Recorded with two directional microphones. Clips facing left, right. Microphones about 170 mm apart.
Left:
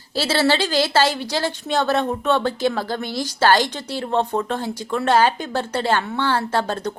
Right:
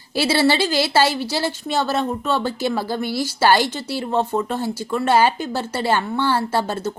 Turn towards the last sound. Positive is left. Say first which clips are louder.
# even
turn(degrees=-10)  # may be behind; listen again after turning